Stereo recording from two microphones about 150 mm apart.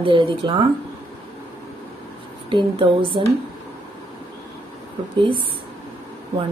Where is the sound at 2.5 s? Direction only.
35° right (ahead or behind).